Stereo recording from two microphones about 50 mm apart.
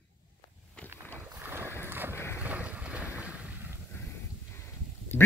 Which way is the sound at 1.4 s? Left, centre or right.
Right.